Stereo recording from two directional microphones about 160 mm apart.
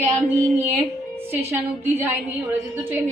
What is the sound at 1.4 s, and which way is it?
Speech, 15° right (ahead or behind).